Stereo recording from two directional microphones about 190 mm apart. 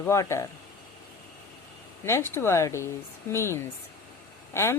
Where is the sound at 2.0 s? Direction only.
15° left (ahead or behind).